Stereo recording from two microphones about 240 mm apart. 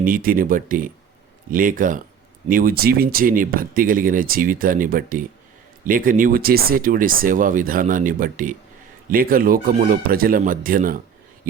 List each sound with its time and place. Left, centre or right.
0.0 s speech: right